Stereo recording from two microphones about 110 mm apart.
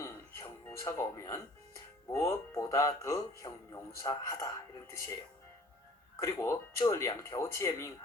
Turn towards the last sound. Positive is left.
turn(degrees=25)  # may be behind; listen again after turning